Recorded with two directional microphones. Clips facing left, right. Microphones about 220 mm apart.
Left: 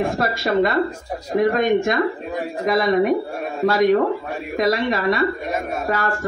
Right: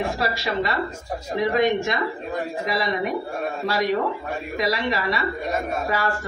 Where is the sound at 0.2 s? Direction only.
50° left (ahead or behind).